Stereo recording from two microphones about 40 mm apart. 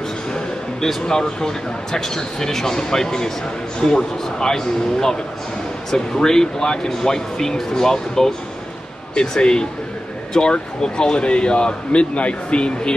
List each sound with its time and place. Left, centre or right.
1.0 s a man's voice: centre